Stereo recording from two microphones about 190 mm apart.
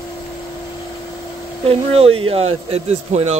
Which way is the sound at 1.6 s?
30° right (ahead or behind).